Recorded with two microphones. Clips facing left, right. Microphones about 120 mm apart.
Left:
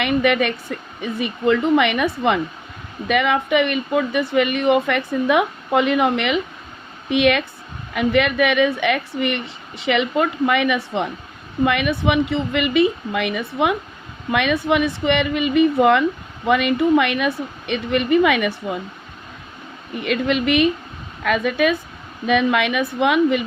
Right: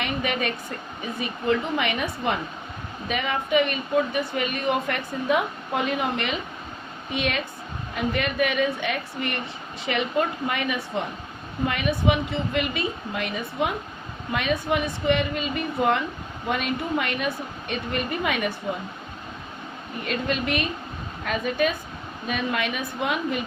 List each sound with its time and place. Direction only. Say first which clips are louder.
0.0 s a woman's voice: left 9 dB; 70° left (ahead or behind); by 18.5 s 90° left
20.1 s a woman's voice: left 7 dB; 85° left